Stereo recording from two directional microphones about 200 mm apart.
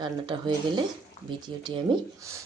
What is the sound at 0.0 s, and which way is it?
Speech, 25° right (ahead or behind).